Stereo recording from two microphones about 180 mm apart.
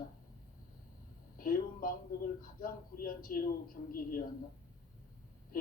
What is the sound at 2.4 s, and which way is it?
A man's voice, 50° left (ahead or behind).